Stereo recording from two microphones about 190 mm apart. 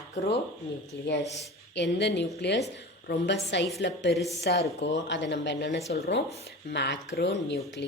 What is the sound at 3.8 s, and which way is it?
Speech, 65° left (ahead or behind).